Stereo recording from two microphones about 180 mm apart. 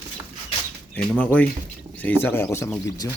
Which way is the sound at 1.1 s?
10° left (ahead or behind).